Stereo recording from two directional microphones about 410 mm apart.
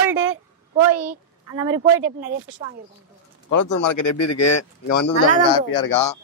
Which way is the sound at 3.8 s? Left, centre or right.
Left.